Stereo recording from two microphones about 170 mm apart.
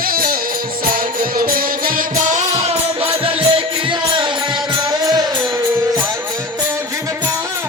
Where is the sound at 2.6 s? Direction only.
35° right (ahead or behind).